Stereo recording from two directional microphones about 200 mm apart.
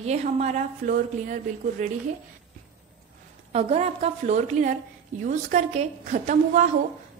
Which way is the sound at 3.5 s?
30° right (ahead or behind).